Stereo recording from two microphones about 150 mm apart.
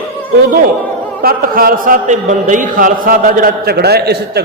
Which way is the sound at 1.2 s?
85° right.